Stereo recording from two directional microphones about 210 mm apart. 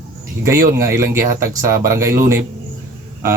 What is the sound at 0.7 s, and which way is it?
Speech, 15° right (ahead or behind).